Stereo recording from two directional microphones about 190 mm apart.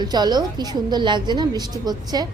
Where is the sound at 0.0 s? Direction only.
20° right (ahead or behind).